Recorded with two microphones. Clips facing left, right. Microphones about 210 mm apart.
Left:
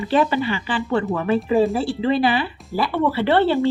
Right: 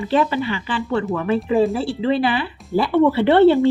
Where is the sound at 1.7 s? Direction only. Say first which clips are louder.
Even; 45° left (ahead or behind).